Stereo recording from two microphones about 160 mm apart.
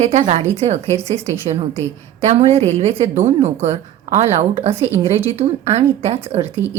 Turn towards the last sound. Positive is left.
turn(degrees=-40)  # may be behind; listen again after turning